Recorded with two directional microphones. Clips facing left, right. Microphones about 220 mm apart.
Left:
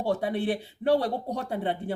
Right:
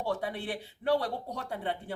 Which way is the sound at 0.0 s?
25° left (ahead or behind).